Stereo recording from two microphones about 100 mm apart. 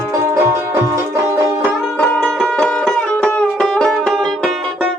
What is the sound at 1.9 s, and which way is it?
Music, 15° left (ahead or behind).